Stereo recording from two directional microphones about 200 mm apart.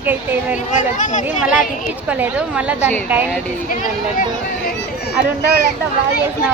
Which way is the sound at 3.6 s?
45° left (ahead or behind).